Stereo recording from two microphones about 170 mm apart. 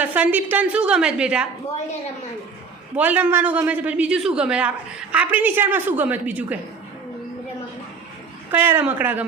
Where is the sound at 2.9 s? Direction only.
10° right (ahead or behind).